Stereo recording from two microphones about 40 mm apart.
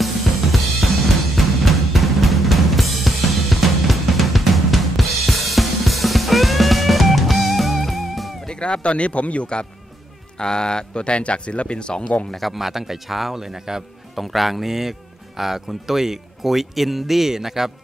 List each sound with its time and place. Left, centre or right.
0.0 s drum kit: centre
8.5 s speech: left
12.3 s a man's voice: centre
14.1 s a man's voice: centre